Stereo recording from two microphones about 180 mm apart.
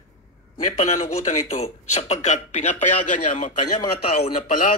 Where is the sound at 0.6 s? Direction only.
40° left (ahead or behind).